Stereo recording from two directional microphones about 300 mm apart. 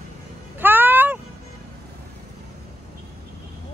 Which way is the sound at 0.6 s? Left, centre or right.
Centre.